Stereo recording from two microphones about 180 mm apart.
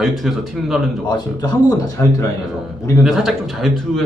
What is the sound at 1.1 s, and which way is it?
Speech, 25° left (ahead or behind).